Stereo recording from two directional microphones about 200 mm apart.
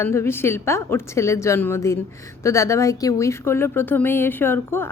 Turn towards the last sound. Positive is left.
turn(degrees=10)  # may be behind; listen again after turning